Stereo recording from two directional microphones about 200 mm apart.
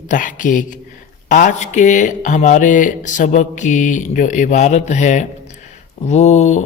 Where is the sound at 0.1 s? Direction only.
40° left (ahead or behind).